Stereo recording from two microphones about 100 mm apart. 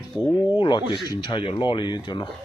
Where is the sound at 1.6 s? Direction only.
50° left (ahead or behind).